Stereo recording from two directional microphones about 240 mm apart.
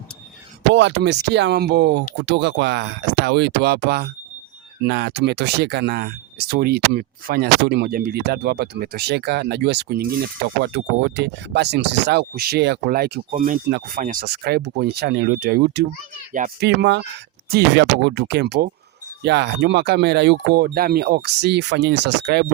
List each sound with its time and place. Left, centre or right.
0.7 s speech: right